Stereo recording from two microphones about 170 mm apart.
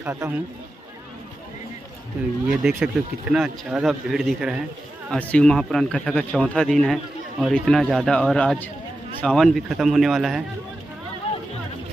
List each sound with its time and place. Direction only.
0.0 s a man's voice: 10° right (ahead or behind)
2.4 s speech: 5° right (ahead or behind)
11.3 s music: 35° left (ahead or behind)